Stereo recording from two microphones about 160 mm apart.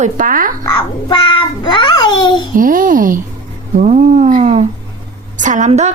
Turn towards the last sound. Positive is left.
turn(degrees=-45)  # may be behind; listen again after turning